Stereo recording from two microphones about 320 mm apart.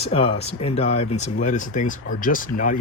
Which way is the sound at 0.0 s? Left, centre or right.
Centre.